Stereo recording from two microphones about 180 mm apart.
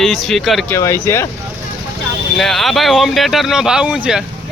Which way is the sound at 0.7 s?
15° left (ahead or behind).